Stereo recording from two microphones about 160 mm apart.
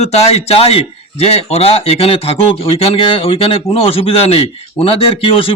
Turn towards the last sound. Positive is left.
turn(degrees=35)  # may be behind; listen again after turning